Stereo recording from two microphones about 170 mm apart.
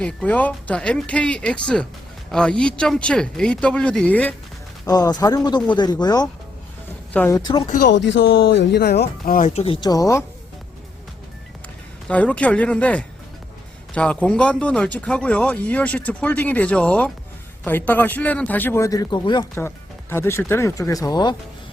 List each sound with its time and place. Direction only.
0.0 s speech: 5° left (ahead or behind)
4.9 s speech: 20° left (ahead or behind)
7.1 s speech: 10° left (ahead or behind)
7.3 s speech: 25° left (ahead or behind)
7.9 s speech: 90° left; by 10.2 s 20° left (ahead or behind)
12.0 s speech: 10° left (ahead or behind); by 19.5 s 25° left (ahead or behind)
19.5 s speech: 15° left (ahead or behind)